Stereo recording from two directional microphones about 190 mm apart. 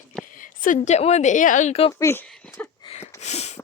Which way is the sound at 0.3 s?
45° left (ahead or behind).